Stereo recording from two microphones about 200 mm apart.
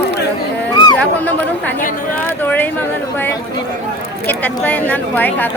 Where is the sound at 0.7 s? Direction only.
20° left (ahead or behind).